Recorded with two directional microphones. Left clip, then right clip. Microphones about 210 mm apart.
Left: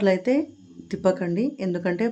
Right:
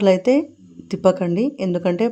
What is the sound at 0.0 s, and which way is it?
A woman's voice, 25° right (ahead or behind).